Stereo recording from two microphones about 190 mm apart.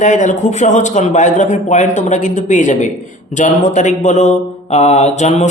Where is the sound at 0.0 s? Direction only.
40° left (ahead or behind).